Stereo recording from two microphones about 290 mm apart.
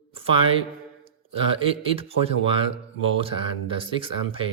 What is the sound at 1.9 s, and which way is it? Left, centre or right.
Speech, centre.